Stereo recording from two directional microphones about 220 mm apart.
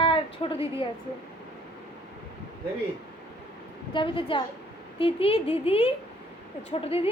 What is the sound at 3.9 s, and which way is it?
A woman's voice, 25° left (ahead or behind).